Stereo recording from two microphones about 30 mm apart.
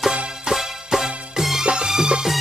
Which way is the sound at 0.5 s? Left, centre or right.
Centre.